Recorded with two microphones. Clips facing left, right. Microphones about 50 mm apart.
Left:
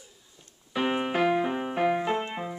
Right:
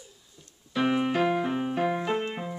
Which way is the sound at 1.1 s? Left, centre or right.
Centre.